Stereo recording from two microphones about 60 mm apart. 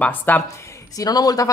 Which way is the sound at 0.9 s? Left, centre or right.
Left.